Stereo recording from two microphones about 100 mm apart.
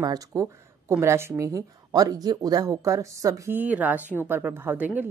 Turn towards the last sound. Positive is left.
turn(degrees=-15)  # may be behind; listen again after turning